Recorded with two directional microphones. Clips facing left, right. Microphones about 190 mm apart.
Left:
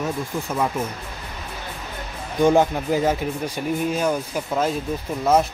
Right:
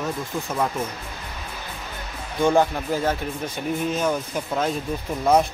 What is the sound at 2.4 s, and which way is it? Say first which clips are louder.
Speech: left 2 dB; 15° left (ahead or behind).